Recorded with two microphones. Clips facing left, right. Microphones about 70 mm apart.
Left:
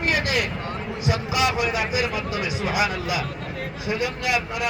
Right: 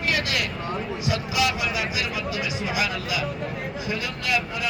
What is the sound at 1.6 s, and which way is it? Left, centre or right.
Speech, left.